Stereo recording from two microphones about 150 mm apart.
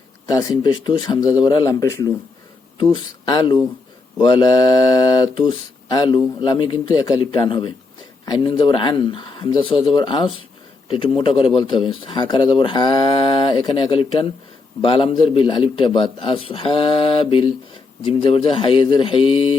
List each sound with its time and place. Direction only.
0.3 s a man's voice: 25° left (ahead or behind)